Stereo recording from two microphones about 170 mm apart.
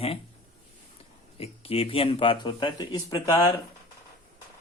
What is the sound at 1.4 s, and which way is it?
Speech, 35° left (ahead or behind).